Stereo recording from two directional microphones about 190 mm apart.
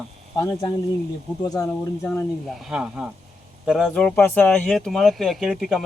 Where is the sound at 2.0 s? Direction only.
5° left (ahead or behind).